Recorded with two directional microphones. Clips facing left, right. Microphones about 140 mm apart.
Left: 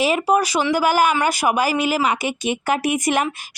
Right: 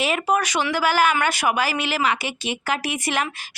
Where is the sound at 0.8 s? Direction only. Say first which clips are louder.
Left 1 dB; 45° left (ahead or behind).